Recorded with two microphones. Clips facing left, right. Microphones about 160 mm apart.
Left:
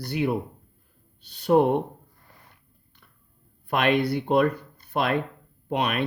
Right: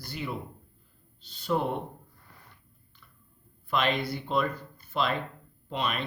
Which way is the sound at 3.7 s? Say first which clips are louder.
Left 6 dB; 60° left (ahead or behind).